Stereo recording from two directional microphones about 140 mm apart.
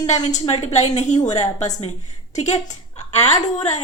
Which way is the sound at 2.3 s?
55° left (ahead or behind).